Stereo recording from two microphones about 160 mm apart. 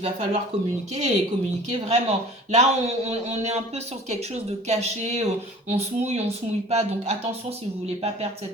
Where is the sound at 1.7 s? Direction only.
40° right (ahead or behind).